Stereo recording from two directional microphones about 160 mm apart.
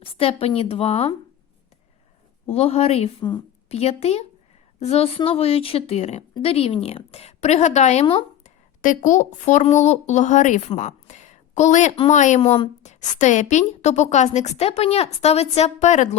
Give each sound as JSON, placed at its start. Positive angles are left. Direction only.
{"t": 0.0, "sound": "a woman's voice", "side_deg": 35}
{"t": 2.5, "sound": "a woman's voice", "side_deg": 40}